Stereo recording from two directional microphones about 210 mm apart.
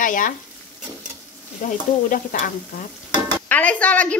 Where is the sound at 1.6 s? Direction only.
35° left (ahead or behind).